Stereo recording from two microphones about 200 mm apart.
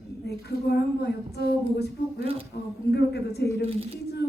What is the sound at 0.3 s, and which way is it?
Speech, 55° left (ahead or behind).